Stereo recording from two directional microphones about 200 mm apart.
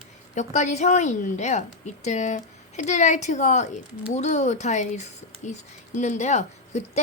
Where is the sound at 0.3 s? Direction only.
35° left (ahead or behind).